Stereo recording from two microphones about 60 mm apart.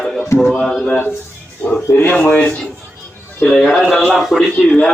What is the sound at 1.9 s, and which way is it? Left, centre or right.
Speech, left.